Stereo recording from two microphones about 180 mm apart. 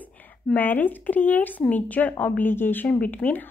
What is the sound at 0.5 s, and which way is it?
Speech, 10° left (ahead or behind).